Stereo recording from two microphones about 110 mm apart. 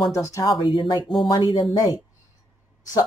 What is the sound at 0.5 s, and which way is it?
Speech, 50° left (ahead or behind).